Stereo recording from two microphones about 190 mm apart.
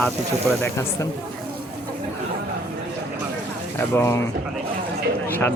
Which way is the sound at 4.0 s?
15° left (ahead or behind).